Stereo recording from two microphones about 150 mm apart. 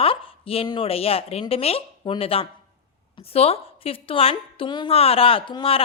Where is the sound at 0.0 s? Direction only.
40° left (ahead or behind).